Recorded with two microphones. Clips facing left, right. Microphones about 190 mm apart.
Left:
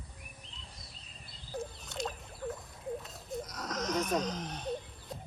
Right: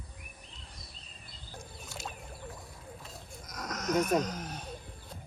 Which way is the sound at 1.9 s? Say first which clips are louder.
Left 4 dB; 5° right (ahead or behind).